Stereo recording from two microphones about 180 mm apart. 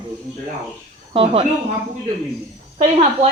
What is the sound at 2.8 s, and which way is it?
Speech, 40° right (ahead or behind).